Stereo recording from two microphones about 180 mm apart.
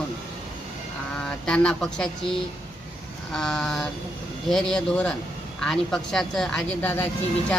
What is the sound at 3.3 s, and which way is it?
Speech, 5° left (ahead or behind).